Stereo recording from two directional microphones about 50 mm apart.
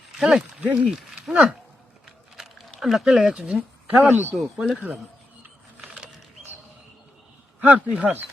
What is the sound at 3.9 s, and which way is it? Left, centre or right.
Speech, right.